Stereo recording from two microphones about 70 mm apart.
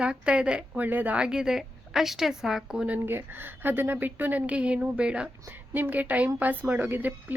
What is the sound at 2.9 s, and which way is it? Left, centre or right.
Speech, right.